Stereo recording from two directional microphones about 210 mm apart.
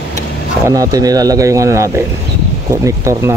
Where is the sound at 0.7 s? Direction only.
15° right (ahead or behind).